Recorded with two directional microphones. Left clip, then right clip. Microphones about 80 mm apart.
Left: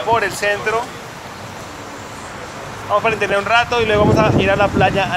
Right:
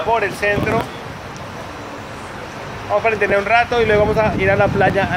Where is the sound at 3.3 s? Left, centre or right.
Right.